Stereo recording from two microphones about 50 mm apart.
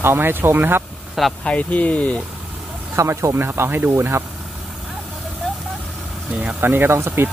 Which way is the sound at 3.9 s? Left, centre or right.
Right.